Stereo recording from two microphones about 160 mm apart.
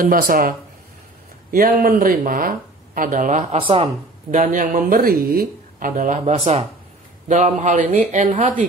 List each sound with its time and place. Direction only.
0.0 s speech: 60° right (ahead or behind)
3.5 s speech: 35° right (ahead or behind)